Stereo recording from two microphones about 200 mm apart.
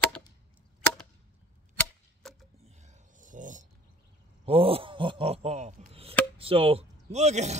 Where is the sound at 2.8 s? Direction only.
40° right (ahead or behind).